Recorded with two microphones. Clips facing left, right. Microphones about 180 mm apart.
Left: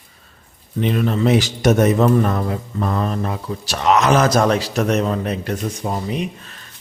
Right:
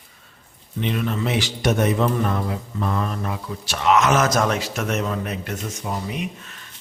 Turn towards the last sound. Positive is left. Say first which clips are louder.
# left 5 dB
turn(degrees=35)  # may be behind; listen again after turning